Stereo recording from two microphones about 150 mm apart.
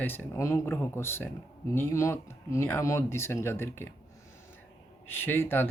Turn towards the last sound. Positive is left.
turn(degrees=15)  # may be behind; listen again after turning